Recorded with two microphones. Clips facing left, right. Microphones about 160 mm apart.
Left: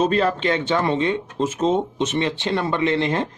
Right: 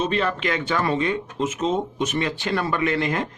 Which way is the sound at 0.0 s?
40° left (ahead or behind).